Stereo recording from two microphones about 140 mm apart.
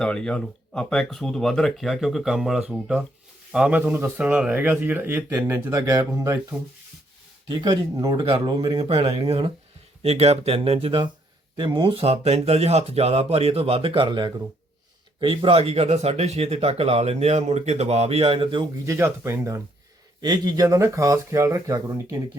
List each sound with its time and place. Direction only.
0.0 s speech: 5° left (ahead or behind); by 6.4 s 20° right (ahead or behind)
7.6 s speech: 30° right (ahead or behind)
18.9 s speech: 20° right (ahead or behind)